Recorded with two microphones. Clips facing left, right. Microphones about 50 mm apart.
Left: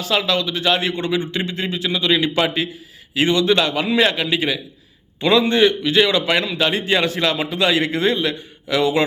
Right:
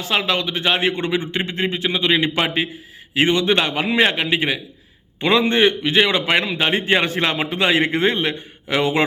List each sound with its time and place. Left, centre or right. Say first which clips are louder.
0.0 s a man's voice: left 1 dB; right